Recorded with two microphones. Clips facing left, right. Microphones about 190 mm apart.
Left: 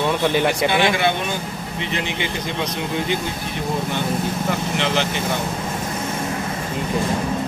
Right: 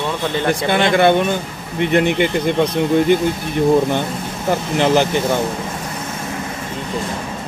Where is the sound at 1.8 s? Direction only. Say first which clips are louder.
Right 11 dB; 55° right (ahead or behind).